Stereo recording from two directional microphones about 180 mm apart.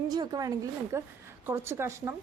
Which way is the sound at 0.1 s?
20° right (ahead or behind).